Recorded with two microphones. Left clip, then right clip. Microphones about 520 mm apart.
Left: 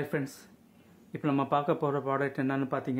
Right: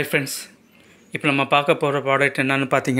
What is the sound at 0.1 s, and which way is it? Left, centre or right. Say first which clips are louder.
Speech: right 12 dB; left.